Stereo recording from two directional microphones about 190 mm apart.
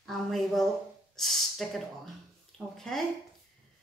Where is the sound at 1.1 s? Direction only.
Centre (ahead or behind).